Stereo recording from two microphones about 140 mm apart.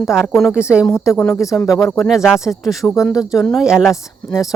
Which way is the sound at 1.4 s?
25° left (ahead or behind).